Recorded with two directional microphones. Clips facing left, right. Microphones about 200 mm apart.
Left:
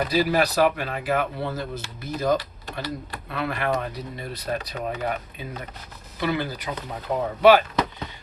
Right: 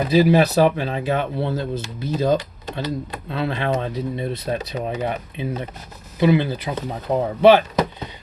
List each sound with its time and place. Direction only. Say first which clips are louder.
0.1 s speech: right 10 dB; 20° right (ahead or behind)